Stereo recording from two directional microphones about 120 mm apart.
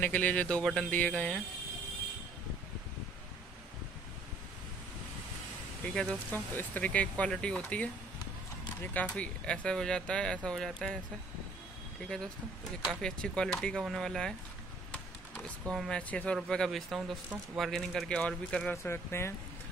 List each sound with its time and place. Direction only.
0.0 s speech: 15° left (ahead or behind)
5.9 s speech: 5° left (ahead or behind)
8.9 s speech: 10° left (ahead or behind)
13.0 s speech: 5° left (ahead or behind)
18.8 s speech: 20° left (ahead or behind)